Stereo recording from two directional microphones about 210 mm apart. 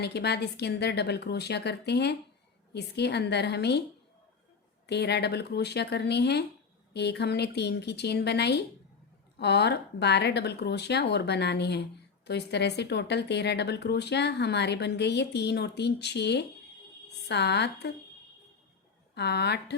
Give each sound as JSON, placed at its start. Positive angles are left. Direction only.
{"t": 0.0, "sound": "speech", "side_deg": 50}
{"t": 4.9, "sound": "speech", "side_deg": 50}
{"t": 19.1, "sound": "speech", "side_deg": 50}